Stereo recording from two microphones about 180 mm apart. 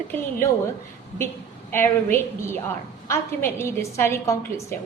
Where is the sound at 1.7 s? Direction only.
10° left (ahead or behind).